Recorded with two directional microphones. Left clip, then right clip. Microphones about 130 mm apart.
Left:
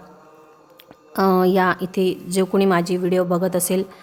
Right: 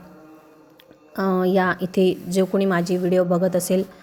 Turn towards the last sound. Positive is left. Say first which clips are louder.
# even
turn(degrees=15)  # may be behind; listen again after turning